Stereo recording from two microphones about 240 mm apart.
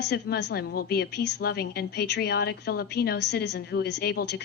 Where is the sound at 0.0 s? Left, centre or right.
Left.